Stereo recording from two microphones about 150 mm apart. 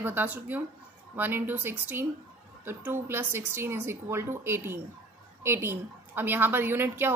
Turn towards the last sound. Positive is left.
turn(degrees=-15)  # may be behind; listen again after turning